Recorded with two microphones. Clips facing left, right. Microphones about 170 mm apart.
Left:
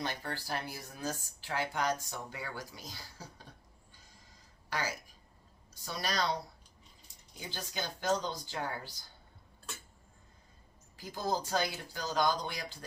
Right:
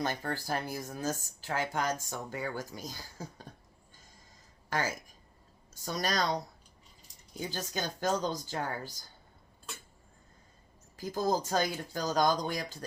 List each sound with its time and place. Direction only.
0.0 s speech: 45° right (ahead or behind)
4.7 s speech: 45° right (ahead or behind)
7.5 s speech: 45° right (ahead or behind)
10.9 s speech: 45° right (ahead or behind)